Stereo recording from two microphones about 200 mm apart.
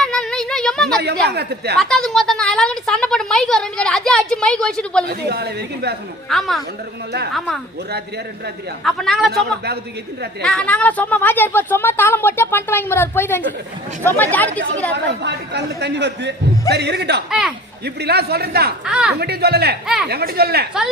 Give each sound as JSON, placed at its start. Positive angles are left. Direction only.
{"t": 0.0, "sound": "a sound", "side_deg": 5}
{"t": 1.3, "sound": "a man's voice", "side_deg": -55}
{"t": 1.8, "sound": "a woman's voice", "side_deg": 0}
{"t": 5.0, "sound": "a man's voice", "side_deg": -55}
{"t": 6.2, "sound": "a woman's voice", "side_deg": 0}
{"t": 8.8, "sound": "a woman's voice", "side_deg": 0}
{"t": 9.3, "sound": "a man's voice", "side_deg": -55}
{"t": 10.4, "sound": "a woman's voice", "side_deg": 5}
{"t": 14.9, "sound": "a man's voice", "side_deg": -60}
{"t": 18.9, "sound": "a woman's voice", "side_deg": -5}
{"t": 19.2, "sound": "a man's voice", "side_deg": -55}